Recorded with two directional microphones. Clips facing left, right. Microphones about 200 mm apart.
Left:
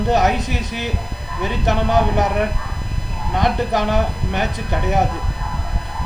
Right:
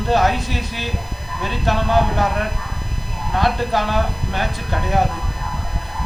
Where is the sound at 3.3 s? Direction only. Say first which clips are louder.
Left 1 dB; 20° left (ahead or behind).